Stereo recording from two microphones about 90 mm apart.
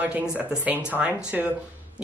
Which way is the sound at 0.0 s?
15° right (ahead or behind).